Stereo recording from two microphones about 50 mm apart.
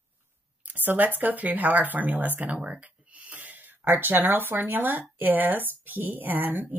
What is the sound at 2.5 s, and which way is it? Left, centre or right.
Speech, right.